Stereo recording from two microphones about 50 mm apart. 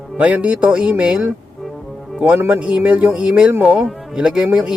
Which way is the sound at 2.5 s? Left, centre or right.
Right.